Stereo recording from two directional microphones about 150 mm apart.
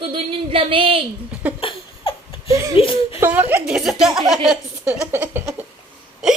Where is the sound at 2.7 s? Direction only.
40° left (ahead or behind).